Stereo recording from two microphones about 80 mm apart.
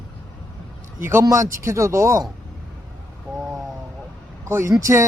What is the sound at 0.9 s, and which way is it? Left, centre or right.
A man's voice, right.